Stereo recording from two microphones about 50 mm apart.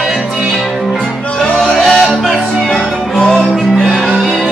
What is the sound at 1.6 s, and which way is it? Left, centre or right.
Music, centre.